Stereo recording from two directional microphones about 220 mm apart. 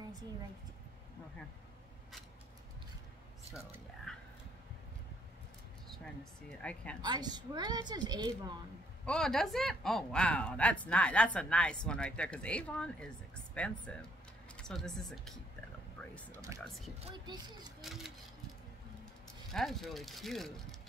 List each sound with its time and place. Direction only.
4.1 s speech: 5° left (ahead or behind)
6.6 s speech: 5° left (ahead or behind)
7.1 s a woman's voice: 20° right (ahead or behind)
9.0 s speech: 5° left (ahead or behind)
16.0 s a sound: 5° left (ahead or behind)
16.6 s speech: centre (ahead or behind)
19.5 s speech: centre (ahead or behind)